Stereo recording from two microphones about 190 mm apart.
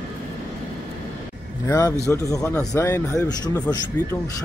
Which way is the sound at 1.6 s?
15° left (ahead or behind).